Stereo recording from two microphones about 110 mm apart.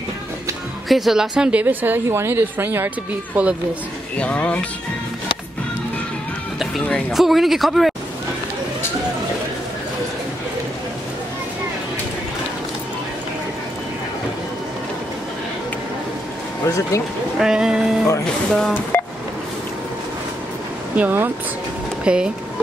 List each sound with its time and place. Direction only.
0.8 s speech: centre (ahead or behind)
4.2 s speech: 10° left (ahead or behind)
7.1 s speech: centre (ahead or behind)
16.6 s speech: 30° left (ahead or behind)
17.4 s speech: 5° right (ahead or behind)
18.2 s speech: 5° left (ahead or behind)
20.9 s speech: 15° right (ahead or behind)